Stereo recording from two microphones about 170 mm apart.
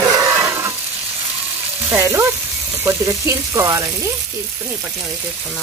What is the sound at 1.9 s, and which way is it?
Speech, 15° right (ahead or behind).